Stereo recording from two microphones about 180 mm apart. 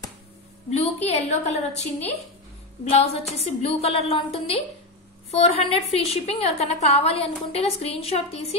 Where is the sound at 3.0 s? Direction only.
35° left (ahead or behind).